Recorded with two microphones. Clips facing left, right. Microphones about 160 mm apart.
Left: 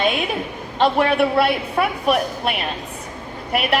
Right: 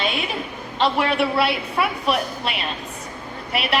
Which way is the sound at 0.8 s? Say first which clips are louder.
Left 3 dB; 50° left (ahead or behind).